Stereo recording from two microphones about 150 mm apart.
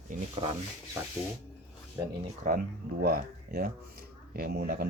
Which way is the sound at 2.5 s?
75° right (ahead or behind).